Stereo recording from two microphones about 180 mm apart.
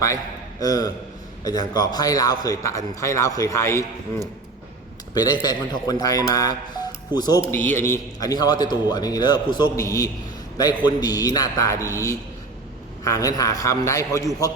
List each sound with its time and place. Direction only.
0.6 s a man's voice: 20° left (ahead or behind)
5.1 s a man's voice: 20° left (ahead or behind)
7.5 s a man's voice: 10° left (ahead or behind)